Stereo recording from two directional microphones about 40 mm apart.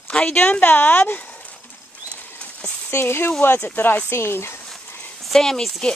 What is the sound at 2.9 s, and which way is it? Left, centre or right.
Speech, left.